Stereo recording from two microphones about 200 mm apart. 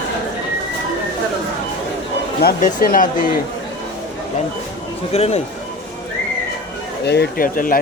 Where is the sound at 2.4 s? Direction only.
40° left (ahead or behind).